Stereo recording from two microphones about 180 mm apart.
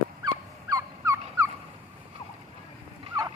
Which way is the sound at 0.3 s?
20° right (ahead or behind).